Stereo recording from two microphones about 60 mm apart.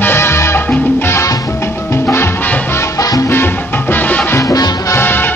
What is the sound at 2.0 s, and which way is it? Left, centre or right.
Music, left.